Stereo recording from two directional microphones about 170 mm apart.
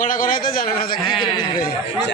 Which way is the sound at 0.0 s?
50° left (ahead or behind).